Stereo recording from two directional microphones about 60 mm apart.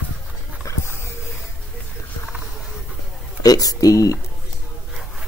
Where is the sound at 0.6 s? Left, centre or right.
Left.